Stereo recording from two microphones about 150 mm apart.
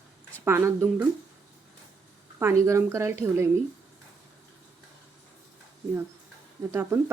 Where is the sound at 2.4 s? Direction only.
20° right (ahead or behind).